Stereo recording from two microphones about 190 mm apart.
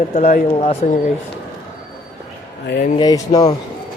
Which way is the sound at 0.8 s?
40° left (ahead or behind).